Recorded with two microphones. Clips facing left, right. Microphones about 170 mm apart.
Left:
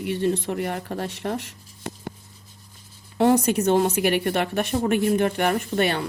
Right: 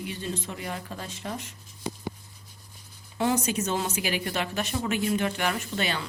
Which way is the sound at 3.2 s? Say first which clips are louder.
Left 7 dB; 60° left (ahead or behind).